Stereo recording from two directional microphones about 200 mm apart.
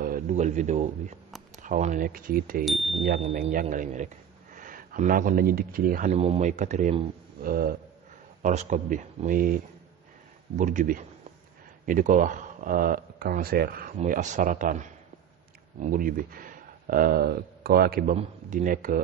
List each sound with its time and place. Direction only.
0.0 s a man's voice: 40° right (ahead or behind)
2.6 s speech: centre (ahead or behind)
3.2 s speech: 35° right (ahead or behind)
10.6 s speech: 40° right (ahead or behind)
18.1 s speech: 40° right (ahead or behind)